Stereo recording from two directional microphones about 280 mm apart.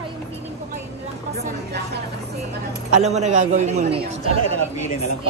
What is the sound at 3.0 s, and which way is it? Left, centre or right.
A man's voice, right.